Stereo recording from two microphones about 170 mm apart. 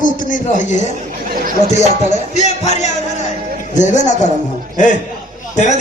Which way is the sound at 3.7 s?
45° left (ahead or behind).